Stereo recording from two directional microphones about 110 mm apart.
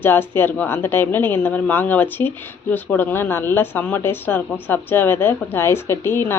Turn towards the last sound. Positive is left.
turn(degrees=20)  # may be behind; listen again after turning